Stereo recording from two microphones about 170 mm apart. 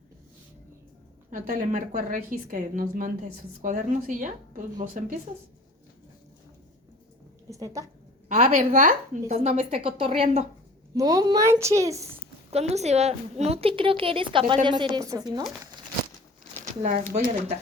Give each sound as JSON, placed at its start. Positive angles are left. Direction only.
{"t": 1.3, "sound": "a woman's voice", "side_deg": -50}
{"t": 7.5, "sound": "a woman's voice", "side_deg": -20}
{"t": 8.5, "sound": "a woman's voice", "side_deg": -50}
{"t": 10.9, "sound": "a woman's voice", "side_deg": -20}
{"t": 12.1, "sound": "a woman's voice", "side_deg": -40}
{"t": 16.8, "sound": "a woman's voice", "side_deg": -50}